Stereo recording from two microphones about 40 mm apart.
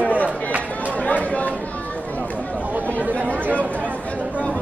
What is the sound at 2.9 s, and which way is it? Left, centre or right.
Chatter, left.